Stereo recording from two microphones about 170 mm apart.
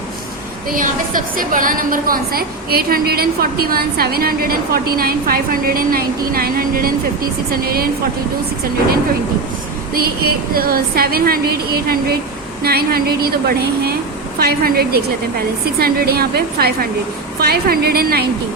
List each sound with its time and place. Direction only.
0.7 s a woman's voice: 55° right (ahead or behind)
9.9 s a woman's voice: 65° right (ahead or behind)